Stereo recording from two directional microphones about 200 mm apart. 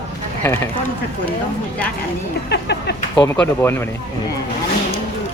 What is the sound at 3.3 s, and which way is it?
Speech, 10° left (ahead or behind).